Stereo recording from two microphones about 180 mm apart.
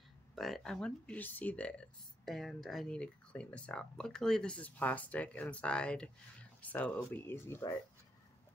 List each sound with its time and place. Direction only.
0.4 s speech: centre (ahead or behind)